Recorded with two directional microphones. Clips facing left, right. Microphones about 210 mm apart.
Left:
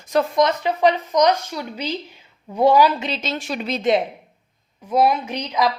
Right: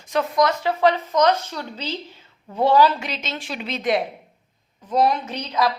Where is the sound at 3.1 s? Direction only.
35° left (ahead or behind).